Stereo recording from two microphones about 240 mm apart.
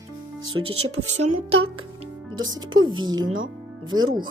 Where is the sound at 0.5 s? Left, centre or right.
Right.